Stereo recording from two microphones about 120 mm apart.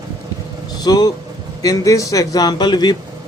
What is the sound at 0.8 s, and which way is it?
A man's voice, 35° left (ahead or behind).